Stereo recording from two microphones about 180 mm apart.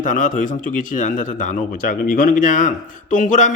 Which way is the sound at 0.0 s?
45° left (ahead or behind).